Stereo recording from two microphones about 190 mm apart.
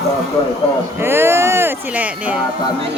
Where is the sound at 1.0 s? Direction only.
10° right (ahead or behind).